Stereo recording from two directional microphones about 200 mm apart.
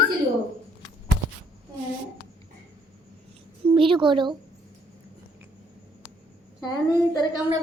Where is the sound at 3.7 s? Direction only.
25° right (ahead or behind).